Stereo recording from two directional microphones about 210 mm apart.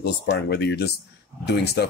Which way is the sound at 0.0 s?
50° left (ahead or behind).